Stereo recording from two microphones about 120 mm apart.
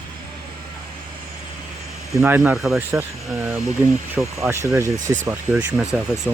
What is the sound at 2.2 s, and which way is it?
Speech, 15° right (ahead or behind).